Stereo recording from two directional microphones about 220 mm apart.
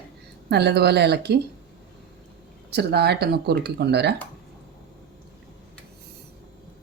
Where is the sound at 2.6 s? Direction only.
50° right (ahead or behind).